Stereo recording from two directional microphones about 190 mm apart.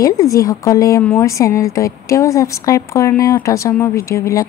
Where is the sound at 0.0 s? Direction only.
15° left (ahead or behind).